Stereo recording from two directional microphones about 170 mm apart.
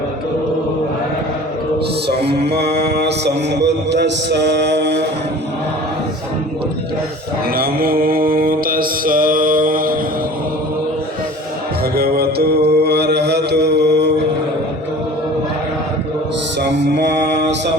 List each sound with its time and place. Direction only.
2.0 s music: 75° right (ahead or behind)
2.9 s mantra: 80° right
7.5 s mantra: 60° right (ahead or behind)
11.9 s mantra: 65° right (ahead or behind); by 14.1 s 80° right
16.6 s music: 90° right